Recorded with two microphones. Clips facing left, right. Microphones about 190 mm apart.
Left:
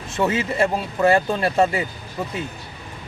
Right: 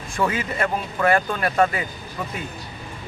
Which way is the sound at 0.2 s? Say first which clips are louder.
Left 3 dB; 25° left (ahead or behind).